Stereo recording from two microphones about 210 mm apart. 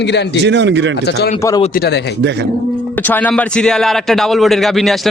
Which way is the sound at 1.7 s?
50° left (ahead or behind).